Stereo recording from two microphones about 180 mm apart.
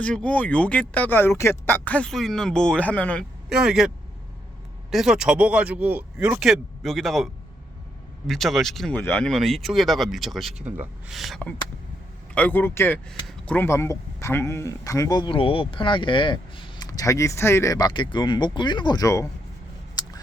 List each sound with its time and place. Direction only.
0.0 s speech: 5° left (ahead or behind)
3.5 s speech: 5° right (ahead or behind)
8.3 s speech: centre (ahead or behind); by 19.3 s 15° left (ahead or behind)